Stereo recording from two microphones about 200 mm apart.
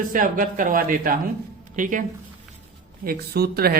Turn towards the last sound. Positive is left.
turn(degrees=-50)  # may be behind; listen again after turning